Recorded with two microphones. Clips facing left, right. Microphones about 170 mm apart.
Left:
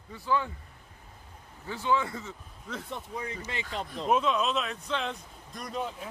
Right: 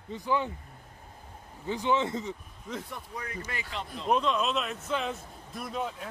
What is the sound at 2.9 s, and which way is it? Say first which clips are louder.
Speech: left 2 dB; 20° left (ahead or behind).